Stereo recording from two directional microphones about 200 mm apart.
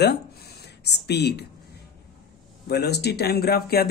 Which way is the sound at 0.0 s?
55° left (ahead or behind).